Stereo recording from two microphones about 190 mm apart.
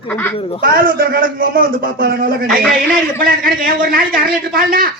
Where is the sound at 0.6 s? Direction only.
50° right (ahead or behind).